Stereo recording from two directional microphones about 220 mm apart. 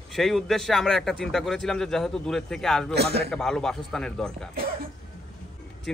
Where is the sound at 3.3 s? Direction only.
5° left (ahead or behind).